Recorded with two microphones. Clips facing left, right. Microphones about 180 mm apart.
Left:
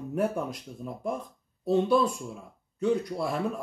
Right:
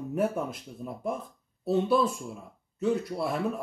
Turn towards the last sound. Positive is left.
turn(degrees=-5)  # may be behind; listen again after turning